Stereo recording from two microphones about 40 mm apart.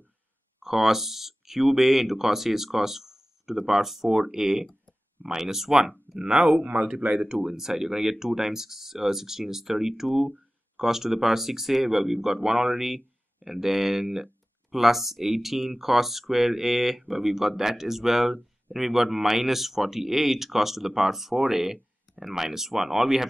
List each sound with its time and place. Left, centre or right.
0.6 s speech: centre
6.1 s speech: right
7.2 s speech: centre